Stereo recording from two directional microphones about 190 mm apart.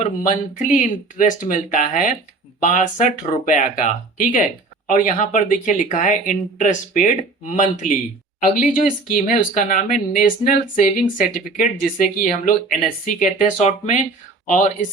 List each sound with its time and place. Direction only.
0.0 s speech: 40° left (ahead or behind)